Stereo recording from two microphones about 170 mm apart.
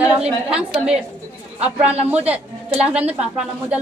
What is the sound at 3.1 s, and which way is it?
Speech, 5° right (ahead or behind).